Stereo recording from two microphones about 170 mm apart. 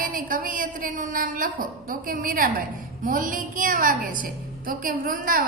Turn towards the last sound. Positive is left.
turn(degrees=-55)  # may be behind; listen again after turning